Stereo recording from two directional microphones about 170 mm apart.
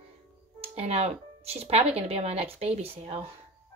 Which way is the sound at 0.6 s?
35° right (ahead or behind).